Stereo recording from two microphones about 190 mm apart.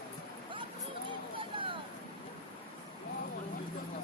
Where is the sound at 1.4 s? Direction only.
25° right (ahead or behind).